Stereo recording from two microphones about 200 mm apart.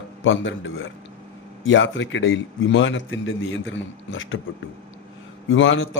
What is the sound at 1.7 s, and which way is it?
A man's voice, 70° left (ahead or behind).